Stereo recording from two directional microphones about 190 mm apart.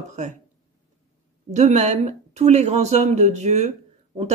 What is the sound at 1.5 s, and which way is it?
Speech, 35° right (ahead or behind).